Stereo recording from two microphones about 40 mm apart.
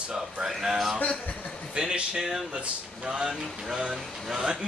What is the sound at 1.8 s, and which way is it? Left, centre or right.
Speech, centre.